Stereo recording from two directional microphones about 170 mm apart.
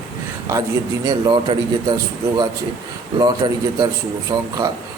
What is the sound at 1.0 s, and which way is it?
Speech, 25° right (ahead or behind).